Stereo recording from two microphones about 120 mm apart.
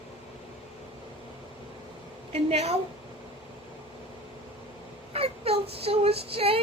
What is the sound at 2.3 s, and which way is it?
Speech, 60° right (ahead or behind).